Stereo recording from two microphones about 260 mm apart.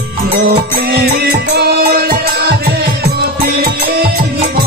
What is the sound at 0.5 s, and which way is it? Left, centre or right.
Music, right.